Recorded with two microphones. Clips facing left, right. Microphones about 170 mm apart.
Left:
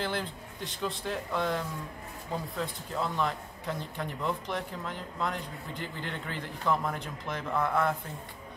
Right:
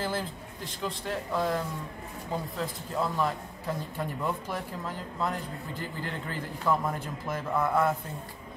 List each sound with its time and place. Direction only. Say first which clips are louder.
0.0 s speech: right 1 dB; 5° right (ahead or behind)
2.6 s speech: right 3 dB; 5° right (ahead or behind)